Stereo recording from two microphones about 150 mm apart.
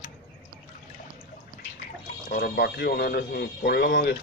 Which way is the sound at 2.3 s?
90° left.